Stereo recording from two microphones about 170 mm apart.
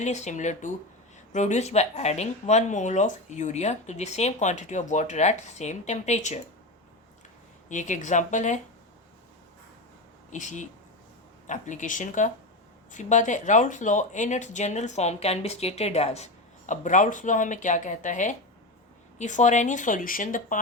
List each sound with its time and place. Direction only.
0.0 s speech: 45° left (ahead or behind)
7.7 s speech: 45° left (ahead or behind)
10.2 s speech: 45° left (ahead or behind)